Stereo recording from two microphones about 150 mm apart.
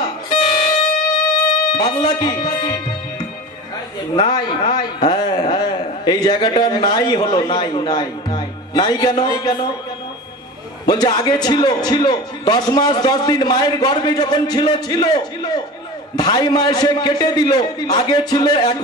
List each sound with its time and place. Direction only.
0.0 s music: 25° left (ahead or behind)
1.7 s a man's voice: 30° left (ahead or behind)
10.9 s a man's voice: 30° left (ahead or behind)